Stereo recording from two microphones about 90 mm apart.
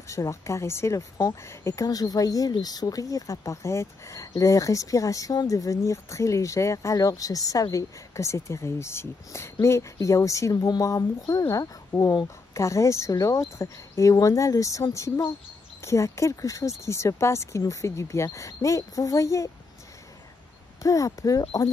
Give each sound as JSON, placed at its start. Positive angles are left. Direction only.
{"t": 0.1, "sound": "speech", "side_deg": 35}
{"t": 12.5, "sound": "speech", "side_deg": 35}
{"t": 20.8, "sound": "speech", "side_deg": 40}